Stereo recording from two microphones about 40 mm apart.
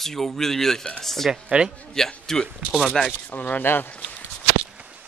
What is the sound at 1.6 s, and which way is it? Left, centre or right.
Speech, right.